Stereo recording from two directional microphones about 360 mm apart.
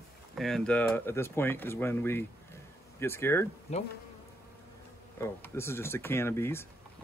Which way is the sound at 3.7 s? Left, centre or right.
Centre.